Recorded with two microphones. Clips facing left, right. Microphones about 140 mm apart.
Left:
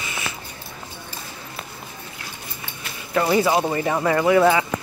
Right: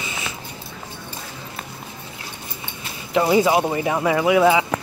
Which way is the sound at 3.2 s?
15° right (ahead or behind).